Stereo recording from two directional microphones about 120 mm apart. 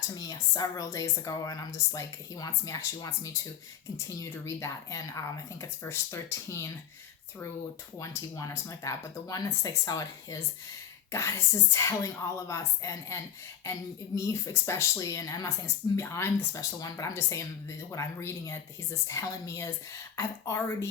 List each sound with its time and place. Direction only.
0.1 s speech: 30° left (ahead or behind)
7.9 s speech: 25° left (ahead or behind)
14.2 s speech: 25° left (ahead or behind)